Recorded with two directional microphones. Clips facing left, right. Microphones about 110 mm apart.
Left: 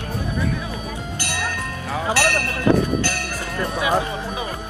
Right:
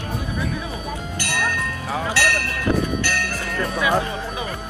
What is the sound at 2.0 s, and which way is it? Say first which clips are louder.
Music: left 3 dB; 20° left (ahead or behind).